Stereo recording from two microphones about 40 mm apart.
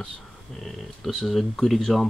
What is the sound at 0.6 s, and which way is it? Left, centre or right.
Speech, centre.